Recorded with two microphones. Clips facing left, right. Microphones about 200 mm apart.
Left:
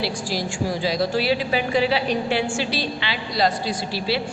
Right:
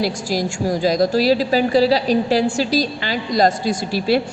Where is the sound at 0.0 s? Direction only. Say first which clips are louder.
Right 5 dB; 45° right (ahead or behind).